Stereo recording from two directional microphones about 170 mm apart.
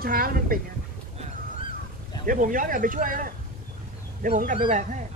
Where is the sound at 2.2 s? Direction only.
50° right (ahead or behind).